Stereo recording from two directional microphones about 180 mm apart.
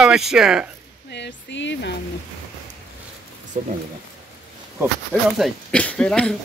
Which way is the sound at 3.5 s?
45° right (ahead or behind).